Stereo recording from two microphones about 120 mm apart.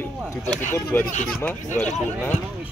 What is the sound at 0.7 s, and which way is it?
Speech, 20° left (ahead or behind).